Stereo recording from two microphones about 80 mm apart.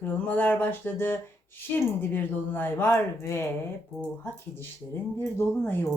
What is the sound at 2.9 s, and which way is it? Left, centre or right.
Speech, left.